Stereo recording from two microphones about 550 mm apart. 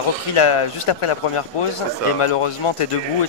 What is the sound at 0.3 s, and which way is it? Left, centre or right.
A man's voice, left.